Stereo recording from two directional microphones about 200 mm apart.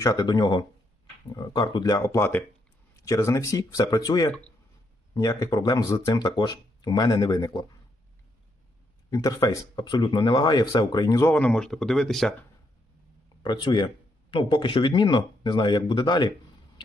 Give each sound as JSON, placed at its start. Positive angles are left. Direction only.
{"t": 0.0, "sound": "speech", "side_deg": 20}
{"t": 9.0, "sound": "speech", "side_deg": 20}
{"t": 13.4, "sound": "speech", "side_deg": 25}